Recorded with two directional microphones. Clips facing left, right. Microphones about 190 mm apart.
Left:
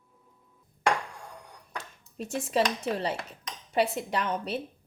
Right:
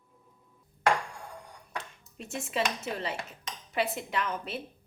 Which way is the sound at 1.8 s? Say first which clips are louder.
Left 8 dB; 40° left (ahead or behind).